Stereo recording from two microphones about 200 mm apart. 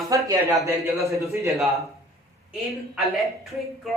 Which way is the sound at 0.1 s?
15° right (ahead or behind).